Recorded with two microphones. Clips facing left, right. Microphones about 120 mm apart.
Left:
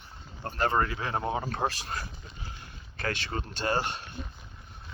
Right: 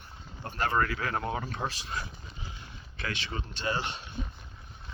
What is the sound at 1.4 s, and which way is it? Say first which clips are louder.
Speech: left 4 dB; 40° left (ahead or behind).